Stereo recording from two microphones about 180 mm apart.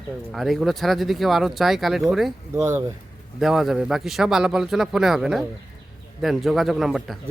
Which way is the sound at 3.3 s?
Centre (ahead or behind).